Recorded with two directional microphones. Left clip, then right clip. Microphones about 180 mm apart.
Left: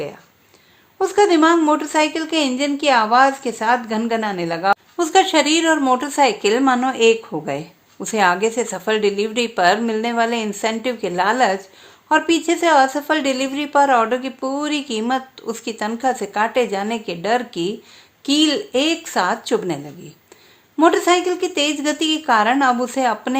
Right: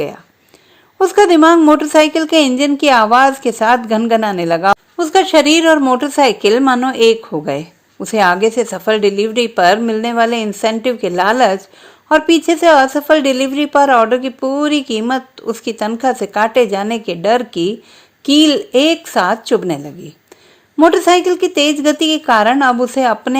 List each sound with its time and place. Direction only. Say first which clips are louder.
0.9 s a woman's voice: right 6 dB; 40° right (ahead or behind)
4.9 s a woman's voice: right 3 dB; 25° right (ahead or behind)